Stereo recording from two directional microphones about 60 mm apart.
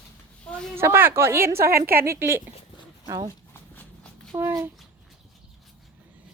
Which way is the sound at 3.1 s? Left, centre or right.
Right.